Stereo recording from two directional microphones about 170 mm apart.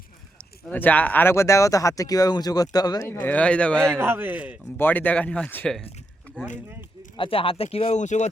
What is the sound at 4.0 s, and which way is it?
Speech, 10° right (ahead or behind).